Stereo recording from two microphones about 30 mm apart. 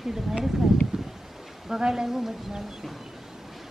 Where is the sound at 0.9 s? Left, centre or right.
Right.